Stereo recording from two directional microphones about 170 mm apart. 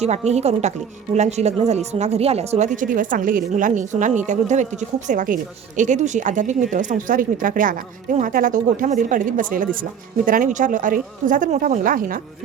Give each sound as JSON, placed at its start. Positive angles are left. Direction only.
{"t": 0.0, "sound": "speech", "side_deg": -40}